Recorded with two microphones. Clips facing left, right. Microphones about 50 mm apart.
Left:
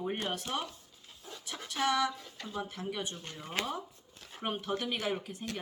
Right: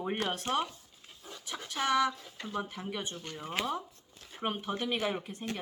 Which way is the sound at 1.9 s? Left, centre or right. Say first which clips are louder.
Right 3 dB; right.